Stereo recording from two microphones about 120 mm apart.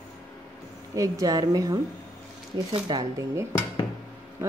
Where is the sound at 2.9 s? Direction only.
35° right (ahead or behind).